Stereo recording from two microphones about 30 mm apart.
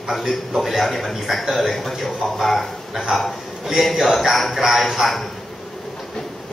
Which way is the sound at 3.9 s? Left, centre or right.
Centre.